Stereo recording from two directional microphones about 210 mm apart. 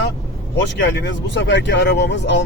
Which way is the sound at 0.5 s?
60° left (ahead or behind).